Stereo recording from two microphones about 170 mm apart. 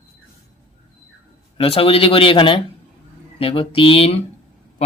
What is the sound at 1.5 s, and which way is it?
Speech, 35° left (ahead or behind).